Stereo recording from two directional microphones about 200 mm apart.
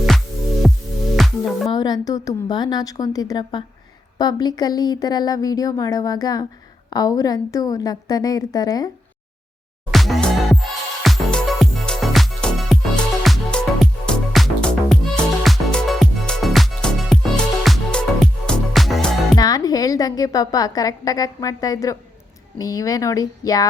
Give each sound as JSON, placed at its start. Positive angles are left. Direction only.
{"t": 0.6, "sound": "music", "side_deg": 0}
{"t": 1.7, "sound": "speech", "side_deg": 20}
{"t": 9.9, "sound": "music", "side_deg": 0}
{"t": 19.4, "sound": "a woman's voice", "side_deg": 20}